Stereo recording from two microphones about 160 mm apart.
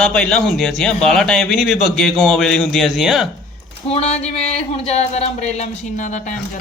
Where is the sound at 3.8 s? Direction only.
40° left (ahead or behind).